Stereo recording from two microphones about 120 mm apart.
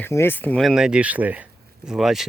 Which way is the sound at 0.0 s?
20° left (ahead or behind).